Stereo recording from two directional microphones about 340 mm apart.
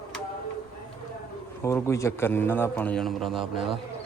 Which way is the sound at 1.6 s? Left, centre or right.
Centre.